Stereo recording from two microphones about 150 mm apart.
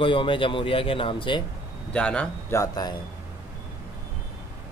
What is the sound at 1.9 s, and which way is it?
Speech, 5° left (ahead or behind).